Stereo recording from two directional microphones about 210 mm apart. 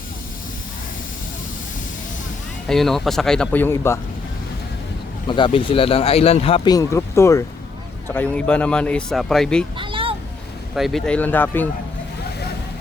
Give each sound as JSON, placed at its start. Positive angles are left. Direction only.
{"t": 2.6, "sound": "speech", "side_deg": 0}
{"t": 5.3, "sound": "speech", "side_deg": 25}
{"t": 9.7, "sound": "a sound", "side_deg": -25}
{"t": 10.8, "sound": "speech", "side_deg": 0}